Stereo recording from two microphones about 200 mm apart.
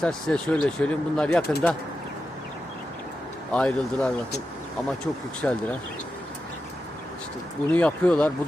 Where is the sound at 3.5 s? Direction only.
5° left (ahead or behind).